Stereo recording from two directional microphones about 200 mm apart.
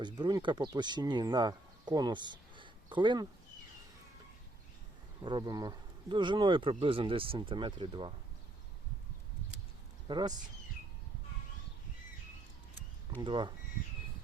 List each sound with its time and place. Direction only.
0.0 s speech: 20° right (ahead or behind)
5.2 s speech: 20° right (ahead or behind)
10.1 s speech: 20° right (ahead or behind)
13.2 s speech: 25° right (ahead or behind)